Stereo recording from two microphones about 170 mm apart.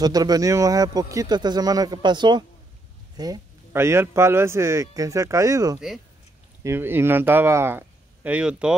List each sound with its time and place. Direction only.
0.0 s speech: 20° right (ahead or behind); by 8.7 s 5° right (ahead or behind)